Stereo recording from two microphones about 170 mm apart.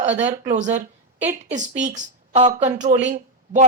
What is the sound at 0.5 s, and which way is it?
A woman's voice, 45° right (ahead or behind).